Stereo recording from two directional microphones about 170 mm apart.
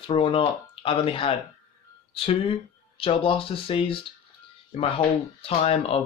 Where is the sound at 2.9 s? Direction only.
35° left (ahead or behind).